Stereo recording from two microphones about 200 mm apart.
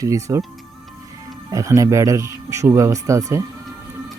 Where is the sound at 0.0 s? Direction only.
15° right (ahead or behind).